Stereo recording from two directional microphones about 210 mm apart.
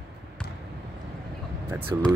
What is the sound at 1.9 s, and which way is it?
Speech, 15° right (ahead or behind).